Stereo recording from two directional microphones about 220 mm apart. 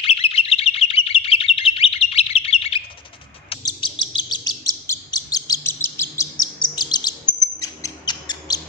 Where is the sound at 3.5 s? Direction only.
20° left (ahead or behind).